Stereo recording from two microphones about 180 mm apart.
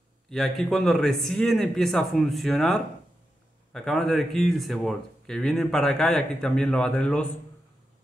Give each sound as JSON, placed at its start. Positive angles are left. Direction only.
{"t": 0.3, "sound": "speech", "side_deg": 0}